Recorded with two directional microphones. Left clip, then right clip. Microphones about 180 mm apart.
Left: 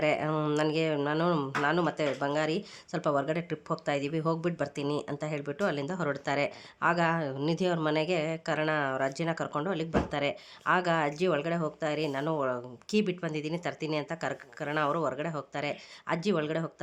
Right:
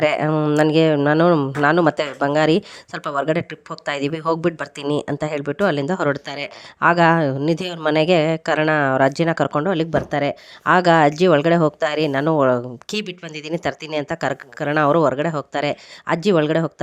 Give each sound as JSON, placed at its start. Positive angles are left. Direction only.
{"t": 0.0, "sound": "speech", "side_deg": -55}
{"t": 0.9, "sound": "speech", "side_deg": -45}
{"t": 1.6, "sound": "speech", "side_deg": -55}